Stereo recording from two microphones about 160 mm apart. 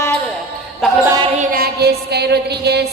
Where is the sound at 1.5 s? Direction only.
75° right (ahead or behind).